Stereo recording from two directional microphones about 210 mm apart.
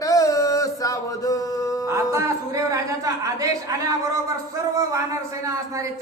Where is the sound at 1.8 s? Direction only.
15° right (ahead or behind).